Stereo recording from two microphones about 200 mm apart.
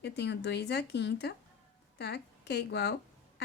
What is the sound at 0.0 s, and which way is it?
A woman's voice, 55° left (ahead or behind).